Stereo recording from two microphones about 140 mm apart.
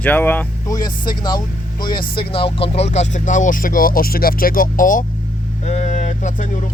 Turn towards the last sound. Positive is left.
turn(degrees=60)  # may be behind; listen again after turning